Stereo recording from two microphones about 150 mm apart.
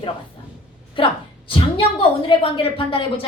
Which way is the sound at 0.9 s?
35° left (ahead or behind).